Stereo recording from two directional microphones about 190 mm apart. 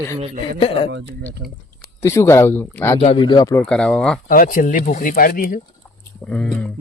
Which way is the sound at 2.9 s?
30° left (ahead or behind).